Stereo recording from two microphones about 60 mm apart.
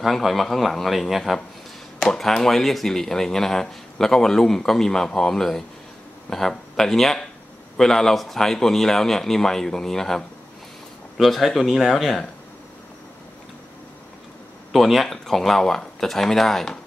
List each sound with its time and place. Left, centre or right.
0.0 s speech: centre
14.7 s speech: centre